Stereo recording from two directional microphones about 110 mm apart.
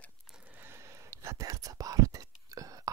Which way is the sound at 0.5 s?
20° right (ahead or behind).